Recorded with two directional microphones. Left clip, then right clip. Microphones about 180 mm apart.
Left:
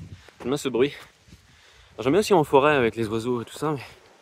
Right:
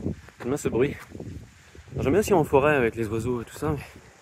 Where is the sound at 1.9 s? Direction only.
20° left (ahead or behind).